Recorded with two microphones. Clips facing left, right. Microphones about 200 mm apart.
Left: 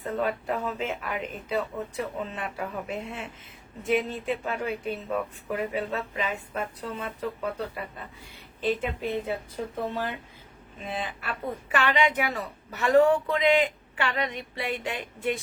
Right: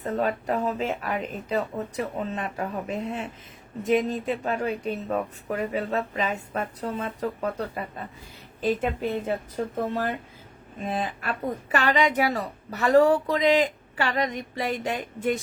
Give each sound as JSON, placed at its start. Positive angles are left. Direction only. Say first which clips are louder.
{"t": 0.0, "sound": "a woman's voice", "louder": "right 2 dB", "side_deg": -40}
{"t": 8.6, "sound": "a woman's voice", "louder": "right 3 dB", "side_deg": -45}